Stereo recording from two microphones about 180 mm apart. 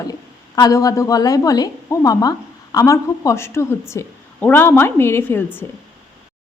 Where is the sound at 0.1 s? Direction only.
20° left (ahead or behind).